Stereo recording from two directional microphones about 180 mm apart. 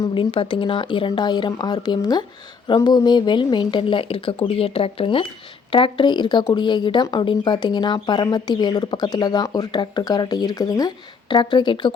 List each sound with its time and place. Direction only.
0.0 s speech: 30° left (ahead or behind)